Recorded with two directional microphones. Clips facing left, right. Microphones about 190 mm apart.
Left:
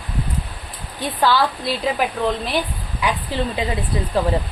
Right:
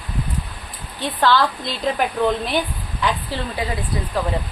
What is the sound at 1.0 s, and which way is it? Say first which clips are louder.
A woman's voice: even; 10° left (ahead or behind).